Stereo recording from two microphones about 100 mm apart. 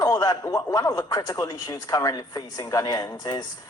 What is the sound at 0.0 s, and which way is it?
A man's voice, 40° left (ahead or behind).